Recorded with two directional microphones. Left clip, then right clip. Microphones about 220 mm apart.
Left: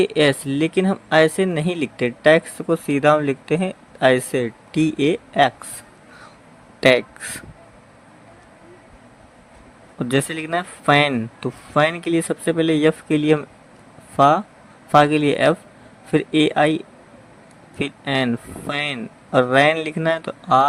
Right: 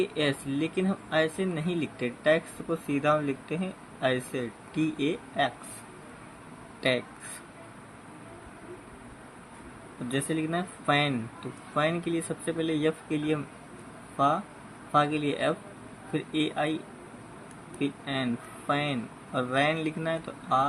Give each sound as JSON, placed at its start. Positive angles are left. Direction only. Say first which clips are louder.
{"t": 0.0, "sound": "speech", "louder": "left 11 dB", "side_deg": 50}
{"t": 6.7, "sound": "a sound", "louder": "left 13 dB", "side_deg": 55}
{"t": 10.1, "sound": "speech", "louder": "left 9 dB", "side_deg": 55}